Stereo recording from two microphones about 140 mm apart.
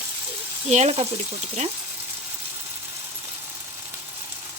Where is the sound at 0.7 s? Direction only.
50° right (ahead or behind).